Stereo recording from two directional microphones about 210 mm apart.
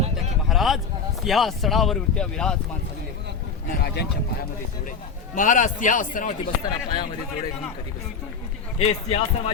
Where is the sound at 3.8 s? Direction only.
50° left (ahead or behind).